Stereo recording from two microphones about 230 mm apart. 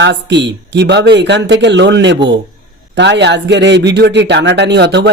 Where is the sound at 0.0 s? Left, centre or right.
Right.